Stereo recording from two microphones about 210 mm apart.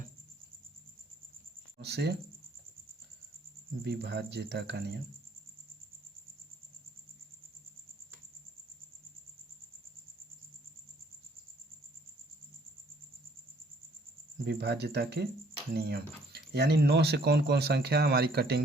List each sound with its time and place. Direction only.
1.8 s speech: 50° right (ahead or behind)
3.8 s speech: 50° right (ahead or behind)
14.4 s speech: 50° right (ahead or behind)